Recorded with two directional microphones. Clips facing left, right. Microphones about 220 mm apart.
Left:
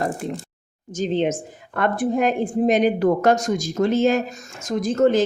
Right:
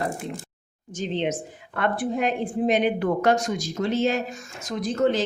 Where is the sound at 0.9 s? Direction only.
45° left (ahead or behind).